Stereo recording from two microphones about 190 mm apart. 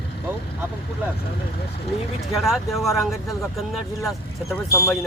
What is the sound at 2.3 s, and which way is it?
Speech, centre (ahead or behind).